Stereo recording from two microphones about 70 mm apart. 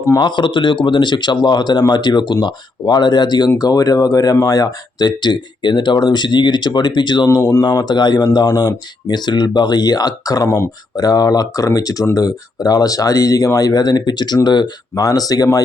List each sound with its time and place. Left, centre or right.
0.2 s speech: left
3.6 s speech: left
7.6 s speech: left